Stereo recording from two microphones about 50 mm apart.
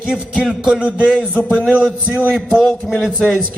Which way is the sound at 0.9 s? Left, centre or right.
Right.